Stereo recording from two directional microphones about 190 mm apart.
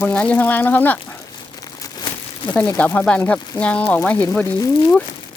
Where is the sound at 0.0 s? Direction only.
5° left (ahead or behind).